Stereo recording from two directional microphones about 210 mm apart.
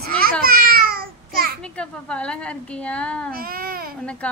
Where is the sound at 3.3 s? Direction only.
45° right (ahead or behind).